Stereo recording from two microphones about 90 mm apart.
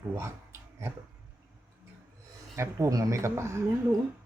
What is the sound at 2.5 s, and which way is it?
Speech, 30° right (ahead or behind).